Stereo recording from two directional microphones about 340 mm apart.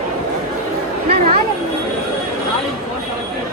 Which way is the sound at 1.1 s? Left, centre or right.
Right.